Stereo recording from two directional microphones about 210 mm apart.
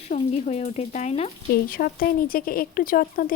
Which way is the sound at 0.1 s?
35° left (ahead or behind).